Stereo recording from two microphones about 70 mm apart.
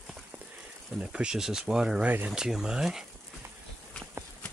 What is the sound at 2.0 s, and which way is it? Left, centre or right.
Speech, right.